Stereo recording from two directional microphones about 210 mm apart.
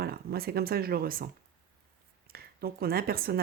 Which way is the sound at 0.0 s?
50° right (ahead or behind).